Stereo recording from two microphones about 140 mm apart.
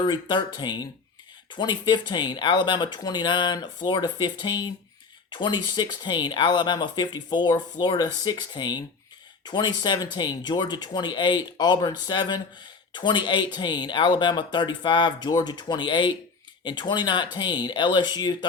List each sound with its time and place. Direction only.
0.0 s speech: 30° left (ahead or behind)